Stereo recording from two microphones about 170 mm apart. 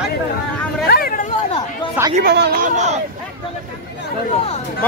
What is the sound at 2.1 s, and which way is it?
Speech, 65° right (ahead or behind).